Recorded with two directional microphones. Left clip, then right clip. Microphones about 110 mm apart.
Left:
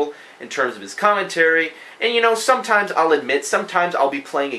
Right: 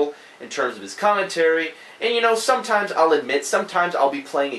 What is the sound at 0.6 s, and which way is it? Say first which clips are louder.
Speech: left 3 dB; 30° left (ahead or behind).